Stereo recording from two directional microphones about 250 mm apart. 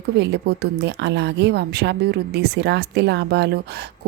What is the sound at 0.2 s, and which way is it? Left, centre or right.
Speech, right.